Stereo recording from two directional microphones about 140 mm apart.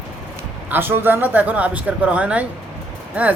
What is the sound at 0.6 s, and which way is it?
Speech, 15° right (ahead or behind).